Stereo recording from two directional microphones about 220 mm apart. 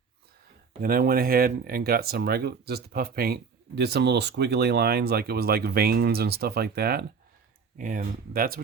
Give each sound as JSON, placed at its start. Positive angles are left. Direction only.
{"t": 0.8, "sound": "speech", "side_deg": -40}